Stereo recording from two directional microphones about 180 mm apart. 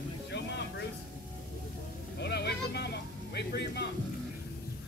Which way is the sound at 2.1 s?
65° left (ahead or behind).